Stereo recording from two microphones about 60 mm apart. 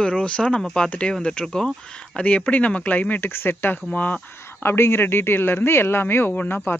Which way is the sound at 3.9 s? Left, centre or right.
Left.